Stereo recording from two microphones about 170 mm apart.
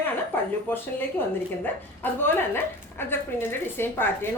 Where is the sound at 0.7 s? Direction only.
10° left (ahead or behind).